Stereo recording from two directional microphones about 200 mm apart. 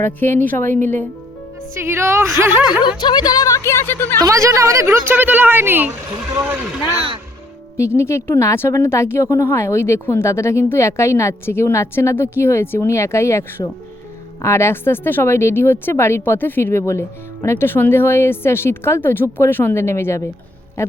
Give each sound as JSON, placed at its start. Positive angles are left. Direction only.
{"t": 0.0, "sound": "speech", "side_deg": 10}
{"t": 1.7, "sound": "speech", "side_deg": -10}
{"t": 3.0, "sound": "speech", "side_deg": 20}
{"t": 4.2, "sound": "speech", "side_deg": -15}
{"t": 7.8, "sound": "speech", "side_deg": 15}
{"t": 14.4, "sound": "speech", "side_deg": 15}